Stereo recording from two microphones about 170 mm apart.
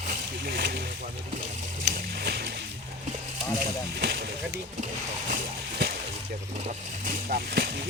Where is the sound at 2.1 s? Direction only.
70° right (ahead or behind).